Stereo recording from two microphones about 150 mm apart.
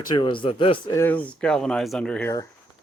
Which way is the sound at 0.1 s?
30° left (ahead or behind).